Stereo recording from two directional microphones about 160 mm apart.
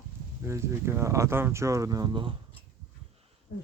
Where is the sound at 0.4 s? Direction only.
15° right (ahead or behind).